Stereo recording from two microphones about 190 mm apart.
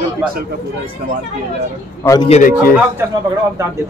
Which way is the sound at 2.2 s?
35° left (ahead or behind).